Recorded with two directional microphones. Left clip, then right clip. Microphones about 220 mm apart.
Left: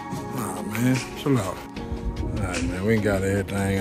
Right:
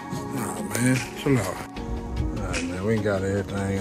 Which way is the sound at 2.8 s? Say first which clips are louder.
Left 2 dB; 20° left (ahead or behind).